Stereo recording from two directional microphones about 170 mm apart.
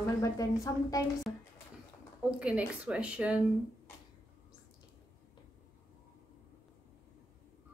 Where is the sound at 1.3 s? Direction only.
20° left (ahead or behind).